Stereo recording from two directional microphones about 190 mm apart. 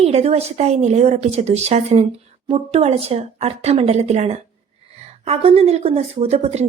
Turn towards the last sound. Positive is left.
turn(degrees=-35)  # may be behind; listen again after turning